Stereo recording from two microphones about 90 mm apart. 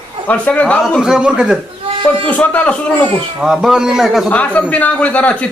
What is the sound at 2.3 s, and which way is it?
Speech, 15° left (ahead or behind).